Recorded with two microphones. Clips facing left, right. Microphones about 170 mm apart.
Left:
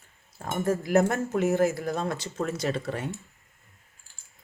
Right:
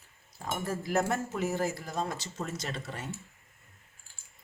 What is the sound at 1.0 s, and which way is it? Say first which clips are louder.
Speech: left 5 dB; 60° left (ahead or behind).